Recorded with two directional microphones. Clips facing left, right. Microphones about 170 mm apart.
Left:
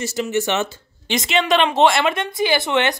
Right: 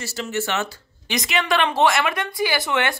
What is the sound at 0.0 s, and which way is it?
A woman's voice, 20° left (ahead or behind).